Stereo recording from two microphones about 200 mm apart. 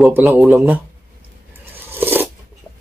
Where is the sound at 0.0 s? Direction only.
5° right (ahead or behind).